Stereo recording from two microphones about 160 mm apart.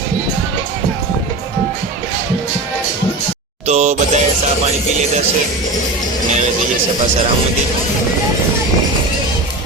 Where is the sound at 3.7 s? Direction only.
45° right (ahead or behind).